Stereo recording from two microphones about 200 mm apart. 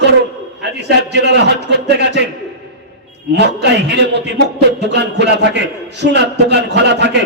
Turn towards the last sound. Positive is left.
turn(degrees=-55)  # may be behind; listen again after turning